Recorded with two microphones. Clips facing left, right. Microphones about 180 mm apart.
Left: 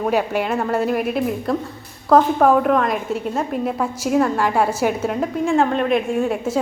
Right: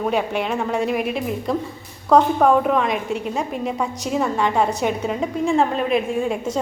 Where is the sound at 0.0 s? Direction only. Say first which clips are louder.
Left 2 dB; 5° left (ahead or behind).